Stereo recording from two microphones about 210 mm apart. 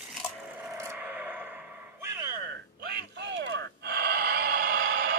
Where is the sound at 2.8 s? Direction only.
50° right (ahead or behind).